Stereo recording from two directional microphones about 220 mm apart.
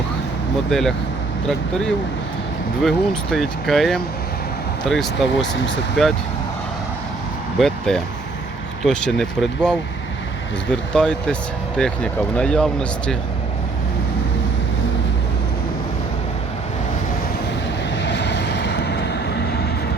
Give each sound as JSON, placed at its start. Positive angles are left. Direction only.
{"t": 0.7, "sound": "speech", "side_deg": 0}
{"t": 2.8, "sound": "speech", "side_deg": 0}
{"t": 7.6, "sound": "speech", "side_deg": 5}
{"t": 17.9, "sound": "vehicle", "side_deg": 55}